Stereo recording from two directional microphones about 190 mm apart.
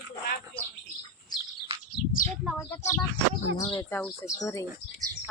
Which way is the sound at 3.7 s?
10° left (ahead or behind).